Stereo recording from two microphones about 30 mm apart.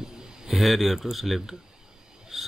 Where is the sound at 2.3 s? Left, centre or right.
Centre.